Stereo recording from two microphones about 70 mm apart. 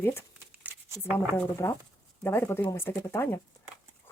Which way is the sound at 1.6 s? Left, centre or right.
Left.